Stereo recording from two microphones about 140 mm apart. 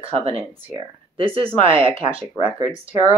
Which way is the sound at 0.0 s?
45° right (ahead or behind).